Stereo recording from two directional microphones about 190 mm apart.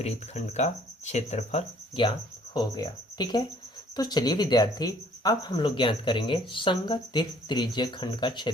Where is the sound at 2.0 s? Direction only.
20° left (ahead or behind).